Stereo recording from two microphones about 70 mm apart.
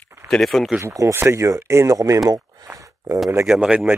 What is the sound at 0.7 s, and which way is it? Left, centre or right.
Speech, right.